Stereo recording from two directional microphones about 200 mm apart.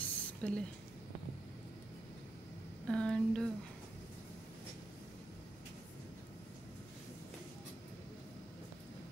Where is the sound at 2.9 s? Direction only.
5° left (ahead or behind).